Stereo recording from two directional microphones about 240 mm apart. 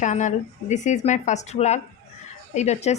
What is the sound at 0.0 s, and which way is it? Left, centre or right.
A woman's voice, left.